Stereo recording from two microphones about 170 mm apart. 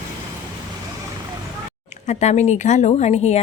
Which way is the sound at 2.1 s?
45° left (ahead or behind).